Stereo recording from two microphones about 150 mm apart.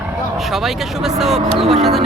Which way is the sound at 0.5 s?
Centre (ahead or behind).